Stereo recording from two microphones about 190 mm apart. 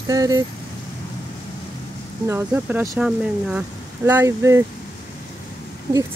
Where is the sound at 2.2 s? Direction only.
10° right (ahead or behind).